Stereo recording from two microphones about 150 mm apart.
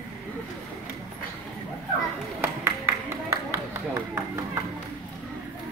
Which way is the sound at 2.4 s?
15° right (ahead or behind).